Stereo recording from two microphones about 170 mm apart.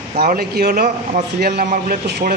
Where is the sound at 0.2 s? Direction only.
65° right (ahead or behind).